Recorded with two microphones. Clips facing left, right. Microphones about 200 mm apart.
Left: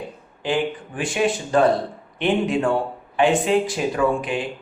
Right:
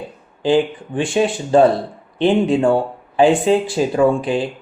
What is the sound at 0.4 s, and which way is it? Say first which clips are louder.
Speech: right 7 dB; 30° right (ahead or behind).